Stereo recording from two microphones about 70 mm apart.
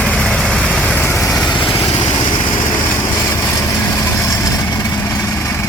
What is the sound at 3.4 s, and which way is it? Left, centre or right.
Vehicle, left.